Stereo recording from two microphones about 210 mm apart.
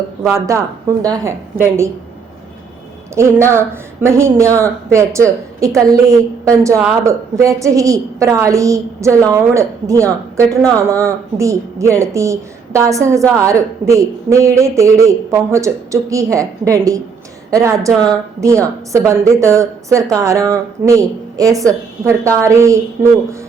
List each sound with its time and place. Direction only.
0.2 s speech: 15° right (ahead or behind)
3.2 s speech: 15° right (ahead or behind)